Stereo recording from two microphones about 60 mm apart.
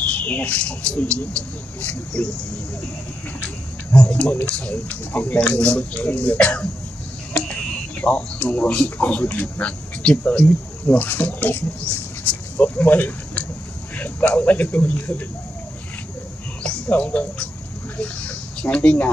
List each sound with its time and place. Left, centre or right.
0.0 s speech: left
3.4 s speech: left
8.0 s speech: left
16.6 s speech: centre
18.6 s speech: centre